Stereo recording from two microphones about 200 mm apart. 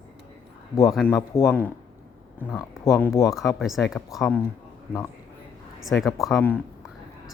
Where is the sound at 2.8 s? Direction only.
15° left (ahead or behind).